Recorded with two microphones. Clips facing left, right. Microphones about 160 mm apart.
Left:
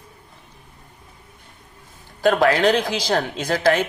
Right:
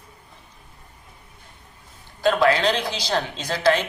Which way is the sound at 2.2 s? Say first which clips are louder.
Left 2 dB; 50° left (ahead or behind).